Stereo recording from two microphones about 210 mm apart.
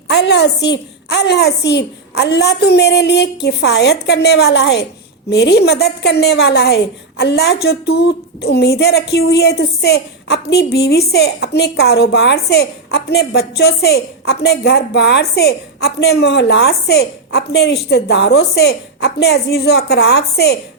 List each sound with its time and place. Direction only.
0.1 s a woman's voice: 55° left (ahead or behind)